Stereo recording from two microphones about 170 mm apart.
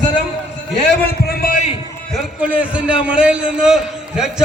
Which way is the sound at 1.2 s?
60° left (ahead or behind).